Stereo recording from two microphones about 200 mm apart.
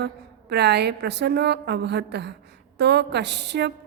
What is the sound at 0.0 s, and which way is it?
A woman's voice, 55° right (ahead or behind).